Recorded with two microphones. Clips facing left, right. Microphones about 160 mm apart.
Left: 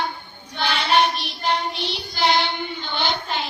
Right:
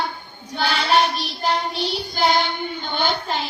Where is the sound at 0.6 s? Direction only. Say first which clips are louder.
Right 1 dB; 40° right (ahead or behind).